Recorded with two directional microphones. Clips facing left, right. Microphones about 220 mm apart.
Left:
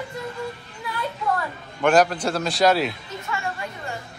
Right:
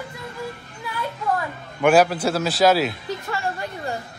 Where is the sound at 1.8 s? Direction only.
5° right (ahead or behind).